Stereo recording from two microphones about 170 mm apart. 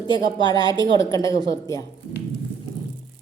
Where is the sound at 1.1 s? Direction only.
20° left (ahead or behind).